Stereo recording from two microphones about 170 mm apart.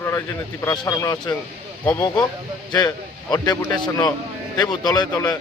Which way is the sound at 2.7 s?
25° left (ahead or behind).